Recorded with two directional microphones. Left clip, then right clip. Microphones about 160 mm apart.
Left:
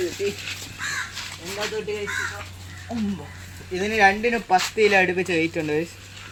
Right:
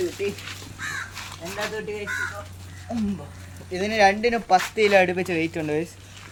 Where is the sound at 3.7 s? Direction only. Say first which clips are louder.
Left 1 dB; 25° right (ahead or behind).